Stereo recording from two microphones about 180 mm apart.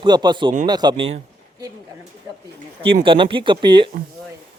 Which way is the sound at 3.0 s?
30° right (ahead or behind).